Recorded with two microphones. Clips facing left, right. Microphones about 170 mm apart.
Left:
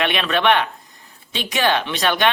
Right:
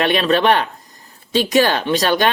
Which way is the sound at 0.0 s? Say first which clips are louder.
Right 4 dB; 40° right (ahead or behind).